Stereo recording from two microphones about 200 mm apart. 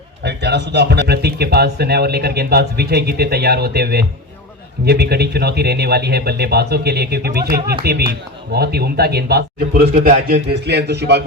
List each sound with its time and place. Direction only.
0.2 s speech: 60° right (ahead or behind)
10.5 s a man's voice: 55° right (ahead or behind)